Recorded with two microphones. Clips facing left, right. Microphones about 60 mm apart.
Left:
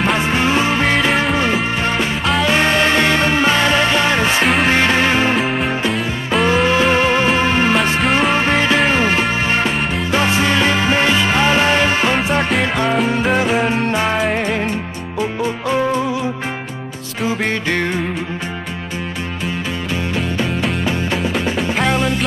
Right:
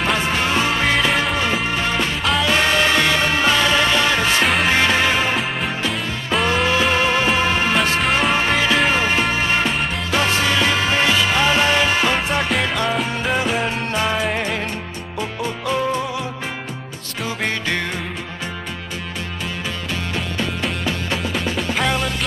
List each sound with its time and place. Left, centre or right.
0.3 s music: centre
0.9 s music: centre
2.4 s music: left
5.3 s music: centre
6.7 s music: centre
8.0 s music: centre
8.4 s music: centre
12.3 s music: centre
17.5 s music: centre
21.5 s music: centre